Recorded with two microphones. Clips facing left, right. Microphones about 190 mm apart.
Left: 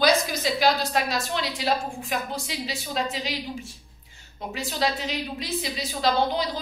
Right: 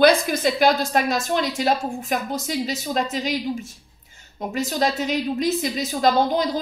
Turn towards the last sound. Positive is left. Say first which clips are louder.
# right 5 dB
turn(degrees=-45)  # may be behind; listen again after turning